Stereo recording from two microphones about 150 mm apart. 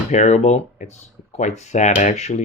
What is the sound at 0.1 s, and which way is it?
Speech, 50° left (ahead or behind).